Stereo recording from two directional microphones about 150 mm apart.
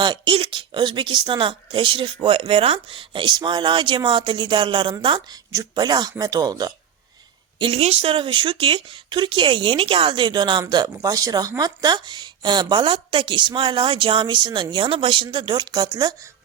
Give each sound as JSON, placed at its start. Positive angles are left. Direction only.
{"t": 0.0, "sound": "speech", "side_deg": -35}
{"t": 7.6, "sound": "speech", "side_deg": -45}